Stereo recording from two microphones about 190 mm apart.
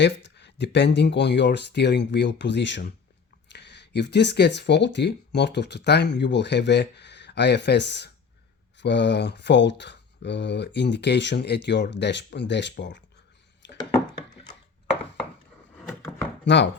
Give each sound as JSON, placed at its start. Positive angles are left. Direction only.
{"t": 0.0, "sound": "speech", "side_deg": 65}
{"t": 13.6, "sound": "a sound", "side_deg": 70}
{"t": 16.5, "sound": "speech", "side_deg": 70}